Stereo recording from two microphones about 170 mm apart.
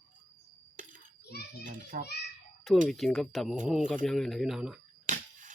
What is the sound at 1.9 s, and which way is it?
Speech, 60° right (ahead or behind).